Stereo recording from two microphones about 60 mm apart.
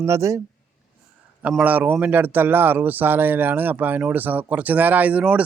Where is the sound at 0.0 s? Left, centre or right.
Right.